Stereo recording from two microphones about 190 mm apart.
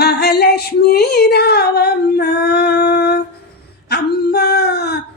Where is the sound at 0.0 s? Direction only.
60° left (ahead or behind).